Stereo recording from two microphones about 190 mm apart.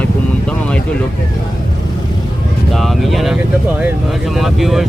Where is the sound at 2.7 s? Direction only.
Centre (ahead or behind).